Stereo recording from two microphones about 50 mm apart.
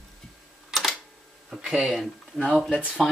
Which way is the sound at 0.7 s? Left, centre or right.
Centre.